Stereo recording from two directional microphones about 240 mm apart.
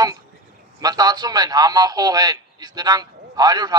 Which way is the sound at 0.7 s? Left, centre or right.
Centre.